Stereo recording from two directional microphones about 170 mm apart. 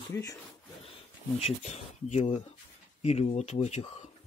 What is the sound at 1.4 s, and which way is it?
Speech, 35° left (ahead or behind).